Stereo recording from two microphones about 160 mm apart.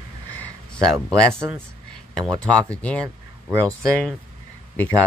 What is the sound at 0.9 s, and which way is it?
Speech, 15° right (ahead or behind).